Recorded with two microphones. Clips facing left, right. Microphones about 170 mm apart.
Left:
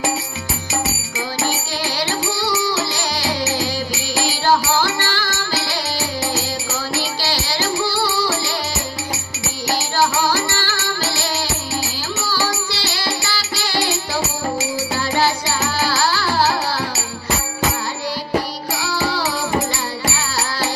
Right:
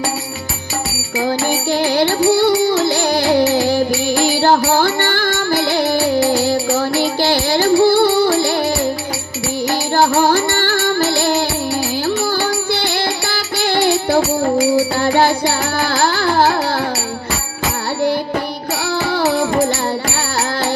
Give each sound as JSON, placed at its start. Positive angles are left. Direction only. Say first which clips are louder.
{"t": 2.0, "sound": "music", "louder": "right 11 dB", "side_deg": -55}
{"t": 9.7, "sound": "music", "louder": "right 4 dB", "side_deg": -55}
{"t": 18.9, "sound": "music", "louder": "right 6 dB", "side_deg": -55}